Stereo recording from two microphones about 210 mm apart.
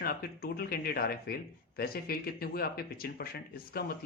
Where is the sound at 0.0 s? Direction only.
45° left (ahead or behind).